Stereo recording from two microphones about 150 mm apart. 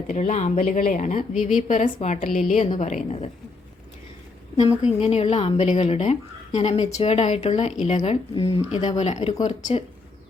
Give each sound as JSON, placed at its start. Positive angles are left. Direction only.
{"t": 0.1, "sound": "speech", "side_deg": 55}
{"t": 4.8, "sound": "speech", "side_deg": 45}